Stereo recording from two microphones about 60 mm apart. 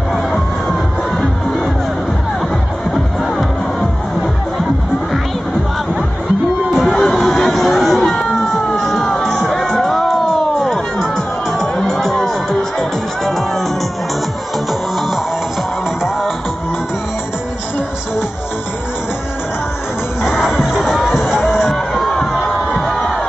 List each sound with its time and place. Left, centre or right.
0.1 s music: centre
6.7 s a sound: centre
8.1 s music: centre
14.7 s music: centre
20.2 s music: centre
21.6 s a sound: centre
22.8 s crowd: centre